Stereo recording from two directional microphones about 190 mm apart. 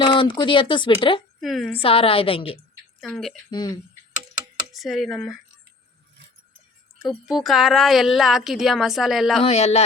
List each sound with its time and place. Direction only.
0.0 s speech: 25° left (ahead or behind)
1.4 s a woman's voice: centre (ahead or behind)
1.8 s speech: 30° left (ahead or behind)
3.0 s speech: centre (ahead or behind)
3.5 s speech: 20° left (ahead or behind)
4.7 s speech: centre (ahead or behind)
7.0 s speech: centre (ahead or behind)
9.4 s a man's voice: 35° left (ahead or behind)